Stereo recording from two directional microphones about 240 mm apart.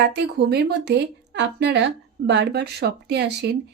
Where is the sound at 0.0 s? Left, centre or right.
Right.